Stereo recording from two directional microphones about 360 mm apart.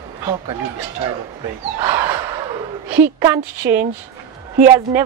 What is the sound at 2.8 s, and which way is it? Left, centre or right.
Speech, centre.